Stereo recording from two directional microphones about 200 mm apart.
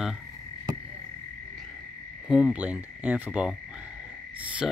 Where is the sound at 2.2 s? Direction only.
5° right (ahead or behind).